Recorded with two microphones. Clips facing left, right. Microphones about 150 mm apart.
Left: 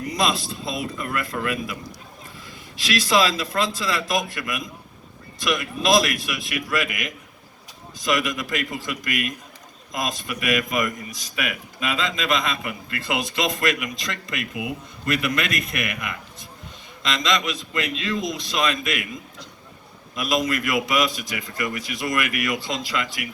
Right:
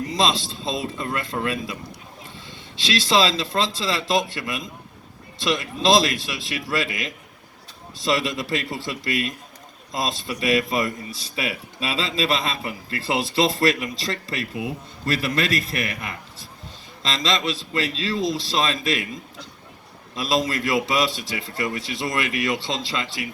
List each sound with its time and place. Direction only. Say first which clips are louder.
0.1 s a man's voice: even; 25° right (ahead or behind)
20.1 s a man's voice: even; 30° right (ahead or behind)